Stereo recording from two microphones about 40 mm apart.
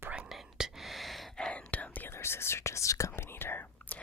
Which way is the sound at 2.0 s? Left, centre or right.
Left.